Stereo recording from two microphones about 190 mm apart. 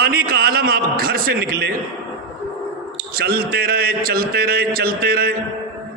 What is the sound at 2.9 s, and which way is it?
A man's voice, 50° right (ahead or behind).